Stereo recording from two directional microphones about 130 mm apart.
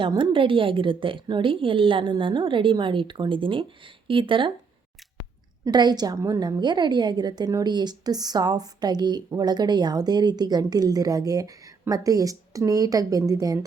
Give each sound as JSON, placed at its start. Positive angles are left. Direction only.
{"t": 0.1, "sound": "a woman's voice", "side_deg": -40}
{"t": 5.6, "sound": "a woman's voice", "side_deg": -35}